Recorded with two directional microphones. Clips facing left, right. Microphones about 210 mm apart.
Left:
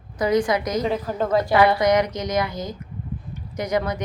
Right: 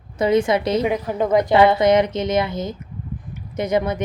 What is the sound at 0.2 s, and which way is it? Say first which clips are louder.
Speech: right 3 dB; 25° right (ahead or behind).